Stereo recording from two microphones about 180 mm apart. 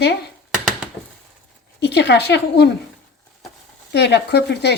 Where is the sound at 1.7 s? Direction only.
70° left (ahead or behind).